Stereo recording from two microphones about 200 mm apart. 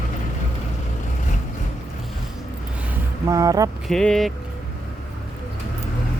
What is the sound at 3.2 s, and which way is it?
Speech, 15° right (ahead or behind).